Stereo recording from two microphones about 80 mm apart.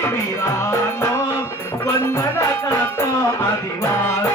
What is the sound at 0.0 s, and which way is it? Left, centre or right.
Music, left.